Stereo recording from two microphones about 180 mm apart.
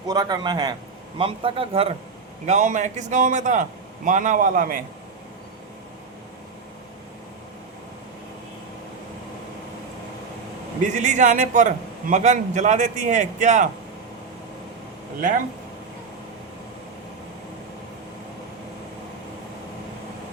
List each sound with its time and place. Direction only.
0.1 s a man's voice: 25° right (ahead or behind); by 4.8 s 50° right (ahead or behind)
10.8 s a man's voice: 45° right (ahead or behind)